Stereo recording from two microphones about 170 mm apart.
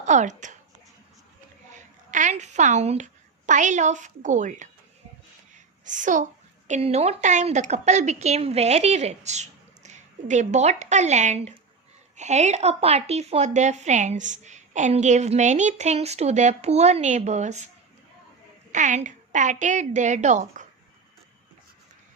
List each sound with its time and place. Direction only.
0.0 s a woman's voice: 45° right (ahead or behind)
2.0 s a woman's voice: 45° right (ahead or behind)
5.8 s a woman's voice: 50° right (ahead or behind)
18.7 s a woman's voice: 45° right (ahead or behind)